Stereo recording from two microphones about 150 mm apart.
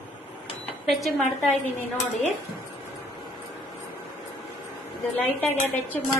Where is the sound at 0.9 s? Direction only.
Centre (ahead or behind).